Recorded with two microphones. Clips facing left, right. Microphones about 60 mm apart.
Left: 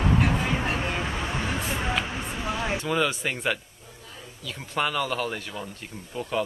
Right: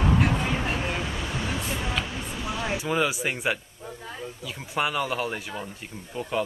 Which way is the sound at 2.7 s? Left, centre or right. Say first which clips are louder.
Right 1 dB; centre.